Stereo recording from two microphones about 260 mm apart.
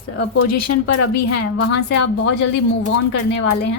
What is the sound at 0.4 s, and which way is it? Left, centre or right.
Speech, left.